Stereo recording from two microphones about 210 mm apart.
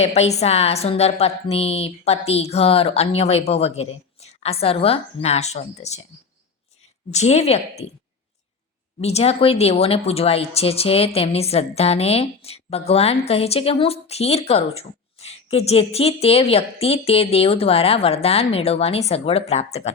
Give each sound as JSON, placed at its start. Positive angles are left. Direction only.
{"t": 0.0, "sound": "speech", "side_deg": 30}
{"t": 7.1, "sound": "a woman's voice", "side_deg": 30}
{"t": 9.0, "sound": "speech", "side_deg": 30}